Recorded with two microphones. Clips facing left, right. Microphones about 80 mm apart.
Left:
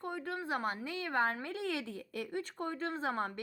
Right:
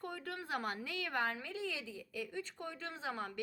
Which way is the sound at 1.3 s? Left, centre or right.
Left.